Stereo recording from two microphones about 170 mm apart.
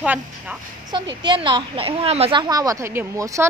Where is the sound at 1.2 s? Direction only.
30° right (ahead or behind).